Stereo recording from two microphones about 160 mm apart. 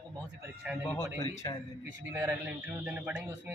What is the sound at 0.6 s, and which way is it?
Speech, 10° right (ahead or behind).